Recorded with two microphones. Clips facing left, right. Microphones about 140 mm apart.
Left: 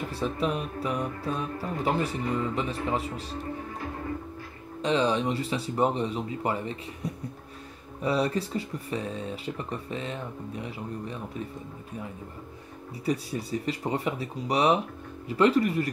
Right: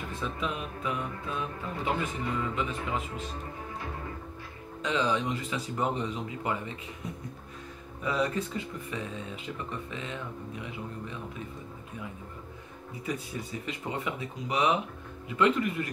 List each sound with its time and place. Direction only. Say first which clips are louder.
0.1 s speech: left 5 dB; 35° left (ahead or behind)
4.8 s speech: left 4 dB; 30° left (ahead or behind)
13.0 s speech: left 6 dB; 35° left (ahead or behind)